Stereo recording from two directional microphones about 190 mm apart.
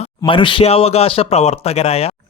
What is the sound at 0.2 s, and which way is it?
Speech, 25° left (ahead or behind).